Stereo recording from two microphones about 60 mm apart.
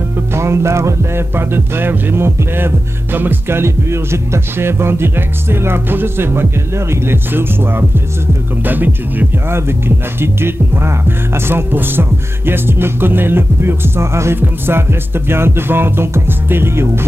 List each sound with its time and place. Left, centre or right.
0.3 s music: right
1.3 s music: right